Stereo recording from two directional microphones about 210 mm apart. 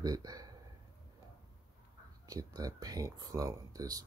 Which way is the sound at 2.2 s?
15° right (ahead or behind).